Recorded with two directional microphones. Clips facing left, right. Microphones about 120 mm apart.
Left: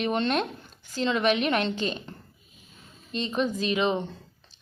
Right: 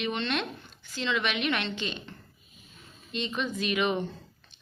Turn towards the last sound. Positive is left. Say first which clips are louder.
# left 2 dB
turn(degrees=30)  # may be behind; listen again after turning